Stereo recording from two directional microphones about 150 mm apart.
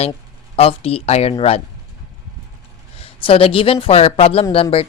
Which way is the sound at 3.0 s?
35° left (ahead or behind).